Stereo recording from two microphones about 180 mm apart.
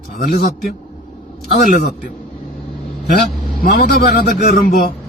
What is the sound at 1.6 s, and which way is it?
Speech, 50° left (ahead or behind).